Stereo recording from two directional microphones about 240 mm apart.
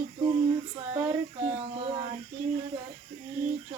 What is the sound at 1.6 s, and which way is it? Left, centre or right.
Speech, right.